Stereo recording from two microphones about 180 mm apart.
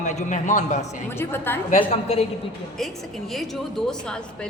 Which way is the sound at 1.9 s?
35° left (ahead or behind).